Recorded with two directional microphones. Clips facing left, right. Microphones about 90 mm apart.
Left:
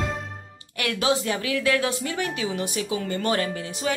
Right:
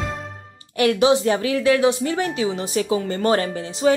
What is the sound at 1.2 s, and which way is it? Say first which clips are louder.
A woman's voice: right 6 dB; 30° right (ahead or behind).